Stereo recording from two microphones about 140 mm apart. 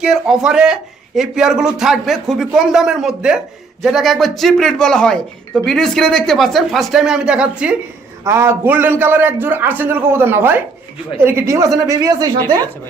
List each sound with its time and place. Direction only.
0.0 s speech: 5° right (ahead or behind)
8.2 s a man's voice: 20° right (ahead or behind)